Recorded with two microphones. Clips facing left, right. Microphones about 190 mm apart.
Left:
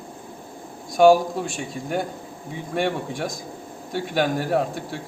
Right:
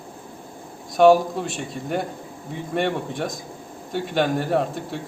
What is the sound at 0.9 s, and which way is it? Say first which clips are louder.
A man's voice: even; centre (ahead or behind).